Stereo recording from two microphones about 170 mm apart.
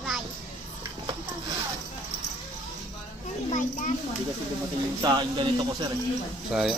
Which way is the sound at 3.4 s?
50° left (ahead or behind).